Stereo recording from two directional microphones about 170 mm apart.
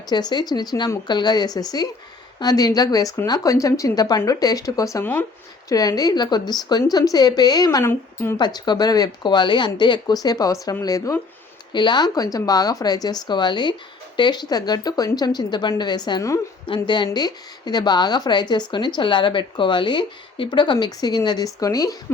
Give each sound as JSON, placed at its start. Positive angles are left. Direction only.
{"t": 0.1, "sound": "speech", "side_deg": 25}
{"t": 8.4, "sound": "speech", "side_deg": 25}